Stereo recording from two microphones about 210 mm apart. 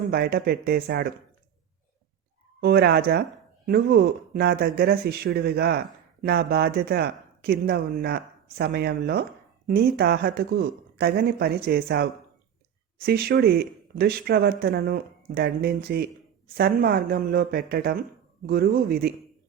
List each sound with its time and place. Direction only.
0.1 s speech: 50° right (ahead or behind)
2.6 s speech: 50° right (ahead or behind)